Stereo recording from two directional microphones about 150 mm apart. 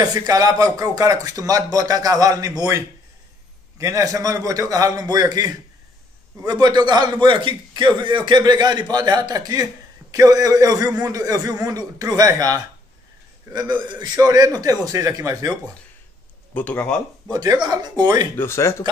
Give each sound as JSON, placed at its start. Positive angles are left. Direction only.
{"t": 0.0, "sound": "speech", "side_deg": -25}
{"t": 16.5, "sound": "speech", "side_deg": 10}
{"t": 17.3, "sound": "speech", "side_deg": -25}
{"t": 18.3, "sound": "speech", "side_deg": 15}